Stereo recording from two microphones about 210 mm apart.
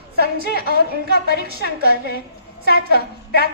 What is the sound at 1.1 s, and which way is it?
A woman's voice, 50° left (ahead or behind).